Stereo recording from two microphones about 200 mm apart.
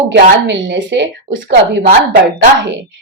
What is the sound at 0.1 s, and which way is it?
A woman's voice, 65° right (ahead or behind).